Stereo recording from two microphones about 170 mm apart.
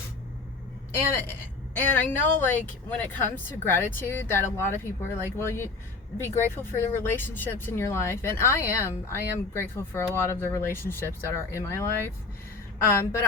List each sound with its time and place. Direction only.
1.1 s speech: 10° left (ahead or behind)